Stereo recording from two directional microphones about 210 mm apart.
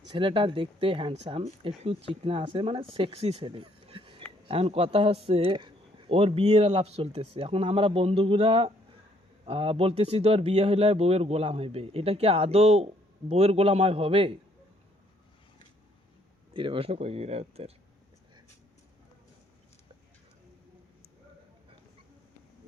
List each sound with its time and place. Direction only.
0.1 s speech: 25° right (ahead or behind)
16.6 s speech: 25° right (ahead or behind)